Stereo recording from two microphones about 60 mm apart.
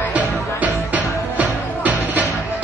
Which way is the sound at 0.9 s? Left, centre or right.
Right.